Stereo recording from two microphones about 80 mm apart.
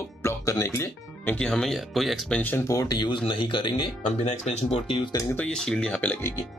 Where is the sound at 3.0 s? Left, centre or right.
Left.